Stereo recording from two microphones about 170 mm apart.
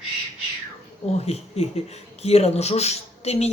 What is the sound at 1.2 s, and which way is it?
Speech, 40° left (ahead or behind).